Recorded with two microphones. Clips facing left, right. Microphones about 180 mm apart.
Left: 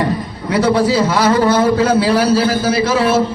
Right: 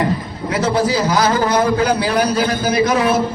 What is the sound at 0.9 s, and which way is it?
A man's voice, 30° left (ahead or behind).